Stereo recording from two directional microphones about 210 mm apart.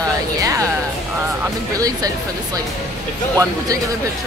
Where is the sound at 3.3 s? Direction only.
15° right (ahead or behind).